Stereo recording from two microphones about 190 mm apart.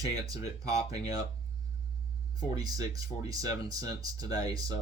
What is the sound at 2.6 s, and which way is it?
Speech, 20° right (ahead or behind).